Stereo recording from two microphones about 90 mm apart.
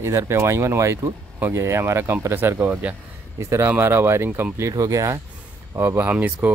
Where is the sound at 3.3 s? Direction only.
30° right (ahead or behind).